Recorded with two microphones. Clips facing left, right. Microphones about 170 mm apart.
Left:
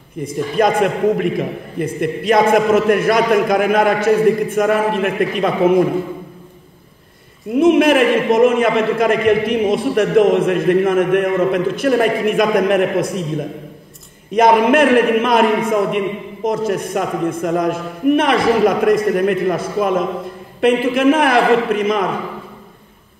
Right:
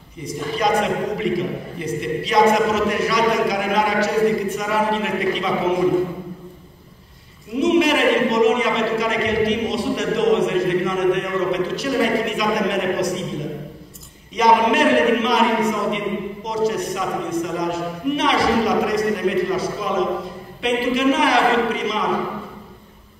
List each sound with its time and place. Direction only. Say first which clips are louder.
0.2 s a man's voice: left 6 dB; 50° left (ahead or behind)
7.5 s a man's voice: left 5 dB; 55° left (ahead or behind)
14.3 s a man's voice: left 5 dB; 55° left (ahead or behind)